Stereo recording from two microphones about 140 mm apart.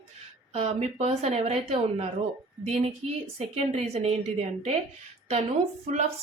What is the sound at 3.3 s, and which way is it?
Speech, 50° right (ahead or behind).